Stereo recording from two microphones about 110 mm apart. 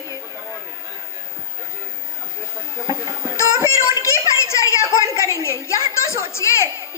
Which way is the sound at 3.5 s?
30° right (ahead or behind).